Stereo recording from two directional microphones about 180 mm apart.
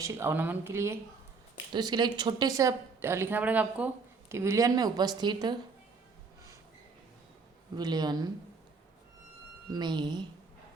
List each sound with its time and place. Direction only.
0.0 s a woman's voice: 15° right (ahead or behind)
7.8 s a woman's voice: 25° right (ahead or behind)
9.6 s a woman's voice: 25° right (ahead or behind)